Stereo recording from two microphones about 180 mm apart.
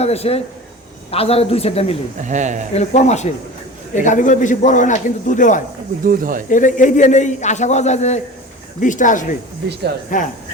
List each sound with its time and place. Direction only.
0.0 s a man's voice: 35° left (ahead or behind)
2.2 s speech: 40° right (ahead or behind)
2.7 s a man's voice: 40° left (ahead or behind)
6.1 s speech: 50° right (ahead or behind)
6.5 s a man's voice: 45° left (ahead or behind)